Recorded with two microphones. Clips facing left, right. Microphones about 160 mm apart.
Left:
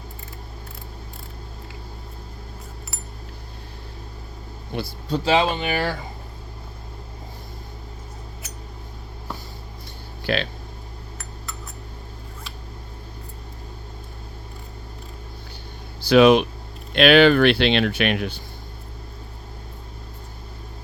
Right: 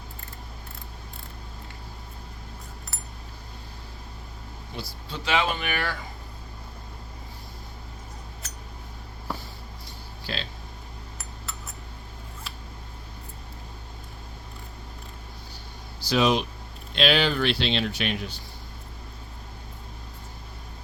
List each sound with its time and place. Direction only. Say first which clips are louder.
4.7 s speech: left 9 dB; 55° left (ahead or behind)
5.1 s speech: left 7 dB; 35° left (ahead or behind)
10.2 s speech: left 11 dB; 65° left (ahead or behind)
16.0 s speech: left 9 dB; 60° left (ahead or behind)